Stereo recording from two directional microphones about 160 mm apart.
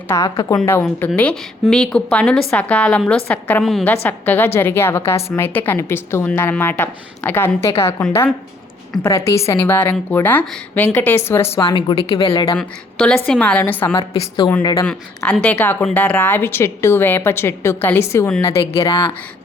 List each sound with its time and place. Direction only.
0.1 s a woman's voice: 20° left (ahead or behind); by 3.8 s centre (ahead or behind)
3.8 s a woman's voice: 10° left (ahead or behind)
9.0 s a woman's voice: 20° left (ahead or behind)
11.7 s speech: 30° left (ahead or behind)
12.5 s a woman's voice: 5° left (ahead or behind)
14.2 s speech: 30° left (ahead or behind)
14.8 s a woman's voice: 5° left (ahead or behind)
18.6 s speech: 35° left (ahead or behind)